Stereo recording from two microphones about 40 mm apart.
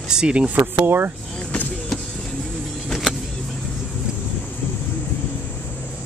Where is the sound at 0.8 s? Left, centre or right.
Right.